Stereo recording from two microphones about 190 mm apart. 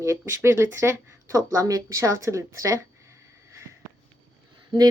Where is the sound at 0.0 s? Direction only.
15° right (ahead or behind).